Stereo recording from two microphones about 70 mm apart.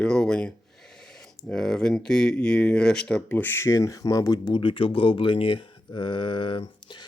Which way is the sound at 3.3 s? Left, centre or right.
Left.